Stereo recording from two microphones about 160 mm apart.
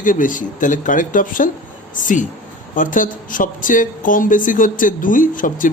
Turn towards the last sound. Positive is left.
turn(degrees=55)  # may be behind; listen again after turning